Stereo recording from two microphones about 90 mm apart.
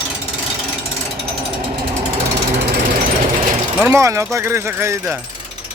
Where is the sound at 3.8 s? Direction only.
30° right (ahead or behind).